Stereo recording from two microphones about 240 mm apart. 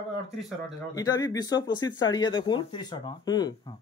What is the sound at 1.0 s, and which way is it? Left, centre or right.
Speech, centre.